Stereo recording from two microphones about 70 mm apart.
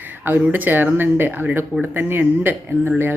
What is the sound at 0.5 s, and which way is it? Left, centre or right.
Speech, right.